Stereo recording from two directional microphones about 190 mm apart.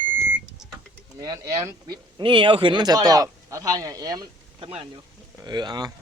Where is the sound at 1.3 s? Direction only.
20° right (ahead or behind).